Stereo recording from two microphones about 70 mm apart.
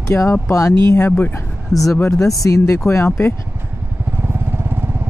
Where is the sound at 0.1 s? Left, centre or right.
Left.